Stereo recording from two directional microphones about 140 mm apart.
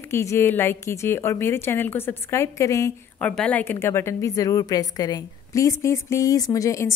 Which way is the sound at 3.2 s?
10° left (ahead or behind).